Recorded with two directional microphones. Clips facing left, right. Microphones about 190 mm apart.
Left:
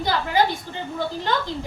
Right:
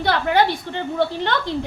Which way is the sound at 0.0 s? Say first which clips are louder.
Right 3 dB; 70° right (ahead or behind).